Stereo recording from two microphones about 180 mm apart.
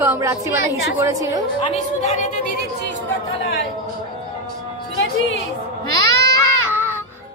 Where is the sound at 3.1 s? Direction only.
90° left.